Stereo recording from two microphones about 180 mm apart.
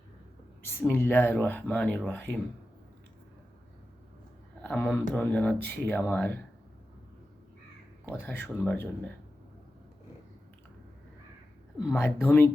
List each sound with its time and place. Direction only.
0.8 s speech: 10° left (ahead or behind)
4.6 s speech: 10° left (ahead or behind)
8.0 s speech: 10° left (ahead or behind)
11.9 s speech: 15° left (ahead or behind)